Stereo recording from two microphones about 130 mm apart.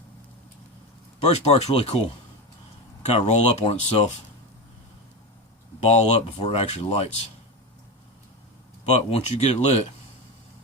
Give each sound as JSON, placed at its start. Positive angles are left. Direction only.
{"t": 1.3, "sound": "speech", "side_deg": 55}
{"t": 5.8, "sound": "speech", "side_deg": 55}
{"t": 8.9, "sound": "speech", "side_deg": 50}